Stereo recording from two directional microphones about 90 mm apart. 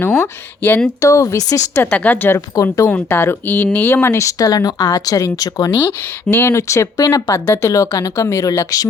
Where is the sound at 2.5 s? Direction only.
35° left (ahead or behind).